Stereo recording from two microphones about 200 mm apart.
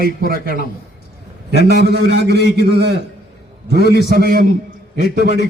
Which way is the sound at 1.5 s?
55° right (ahead or behind).